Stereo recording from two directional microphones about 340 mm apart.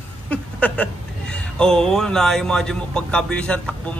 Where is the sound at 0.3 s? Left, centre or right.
Centre.